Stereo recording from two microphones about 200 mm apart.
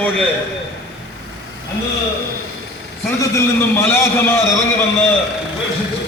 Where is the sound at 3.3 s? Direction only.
10° left (ahead or behind).